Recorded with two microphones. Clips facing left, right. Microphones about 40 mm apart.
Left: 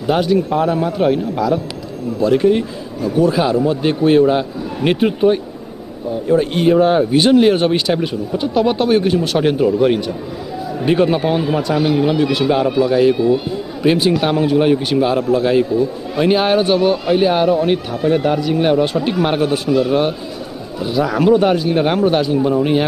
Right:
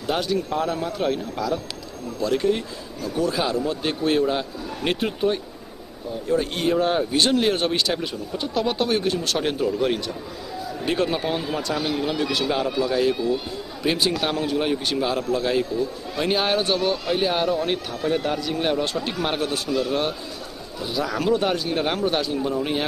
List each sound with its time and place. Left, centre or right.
0.0 s speech: centre